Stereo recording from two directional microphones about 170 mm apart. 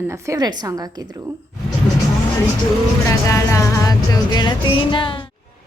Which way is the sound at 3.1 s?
20° left (ahead or behind).